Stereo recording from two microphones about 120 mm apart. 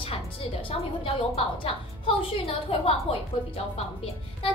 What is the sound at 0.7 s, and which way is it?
A woman's voice, 50° left (ahead or behind).